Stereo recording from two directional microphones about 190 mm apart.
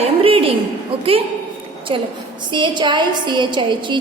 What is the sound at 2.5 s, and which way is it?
A woman's voice, 25° right (ahead or behind).